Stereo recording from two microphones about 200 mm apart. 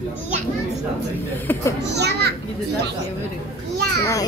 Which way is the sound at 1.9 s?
55° right (ahead or behind).